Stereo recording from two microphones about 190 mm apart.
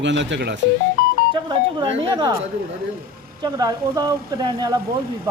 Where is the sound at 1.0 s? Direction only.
50° left (ahead or behind).